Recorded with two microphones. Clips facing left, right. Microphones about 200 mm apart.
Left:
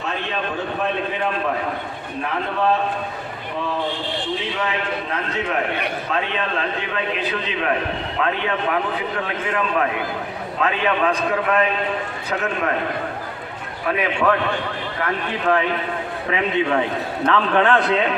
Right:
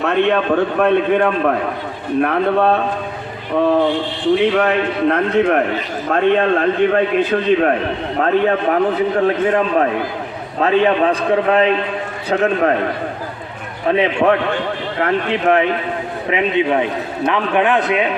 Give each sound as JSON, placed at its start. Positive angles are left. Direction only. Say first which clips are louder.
{"t": 0.0, "sound": "a man's voice", "louder": "right 11 dB", "side_deg": -60}
{"t": 13.8, "sound": "a man's voice", "louder": "right 6 dB", "side_deg": -25}